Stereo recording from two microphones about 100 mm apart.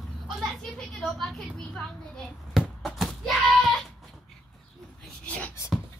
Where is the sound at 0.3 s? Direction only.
5° left (ahead or behind).